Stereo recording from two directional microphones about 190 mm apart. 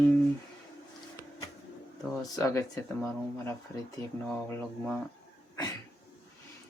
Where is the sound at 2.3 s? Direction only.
15° left (ahead or behind).